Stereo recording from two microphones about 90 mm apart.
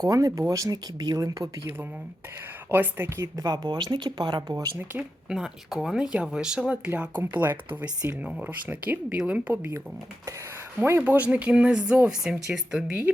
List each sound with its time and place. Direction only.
0.0 s speech: 40° right (ahead or behind)
2.6 s speech: 20° right (ahead or behind)
3.2 s speech: 45° right (ahead or behind)
5.3 s speech: 5° right (ahead or behind)
10.8 s speech: 25° right (ahead or behind)